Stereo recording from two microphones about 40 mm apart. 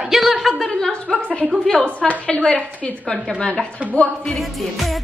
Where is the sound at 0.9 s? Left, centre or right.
Left.